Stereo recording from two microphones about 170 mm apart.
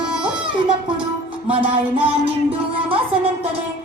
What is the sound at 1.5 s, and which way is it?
Music, 30° right (ahead or behind).